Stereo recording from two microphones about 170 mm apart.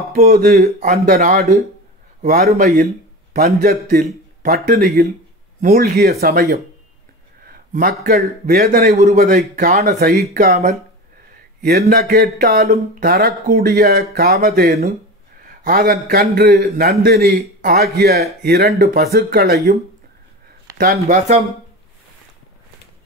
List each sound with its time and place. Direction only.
0.1 s a man's voice: 60° right (ahead or behind)
5.6 s a man's voice: 55° right (ahead or behind)
7.4 s a sound: 60° right (ahead or behind)
8.5 s a man's voice: 60° right (ahead or behind)
8.9 s a man's voice: 40° right (ahead or behind)
9.2 s a man's voice: 55° right (ahead or behind)
11.9 s a man's voice: 65° right (ahead or behind)